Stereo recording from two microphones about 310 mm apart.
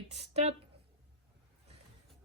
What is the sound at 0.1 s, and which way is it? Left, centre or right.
Speech, right.